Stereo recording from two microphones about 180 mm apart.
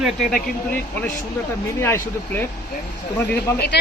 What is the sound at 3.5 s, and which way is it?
Speech, 65° left (ahead or behind).